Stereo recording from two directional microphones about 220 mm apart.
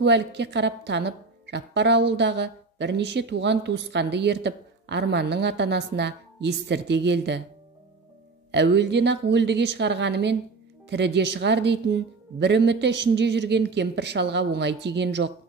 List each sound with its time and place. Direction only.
0.0 s a woman's voice: 50° right (ahead or behind)
8.5 s a woman's voice: 50° right (ahead or behind)